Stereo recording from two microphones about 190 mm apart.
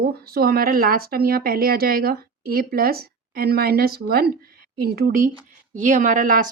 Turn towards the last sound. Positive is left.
turn(degrees=-45)  # may be behind; listen again after turning